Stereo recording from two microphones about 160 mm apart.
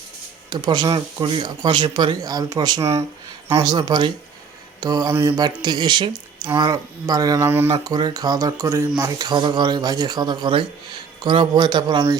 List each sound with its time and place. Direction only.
0.5 s speech: 25° right (ahead or behind)